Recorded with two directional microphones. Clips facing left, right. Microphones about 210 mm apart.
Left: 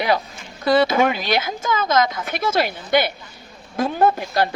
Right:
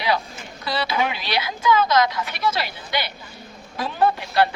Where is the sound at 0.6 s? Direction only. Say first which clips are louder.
Left 8 dB; 50° left (ahead or behind).